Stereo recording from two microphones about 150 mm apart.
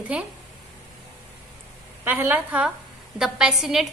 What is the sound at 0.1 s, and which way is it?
Speech, 10° right (ahead or behind).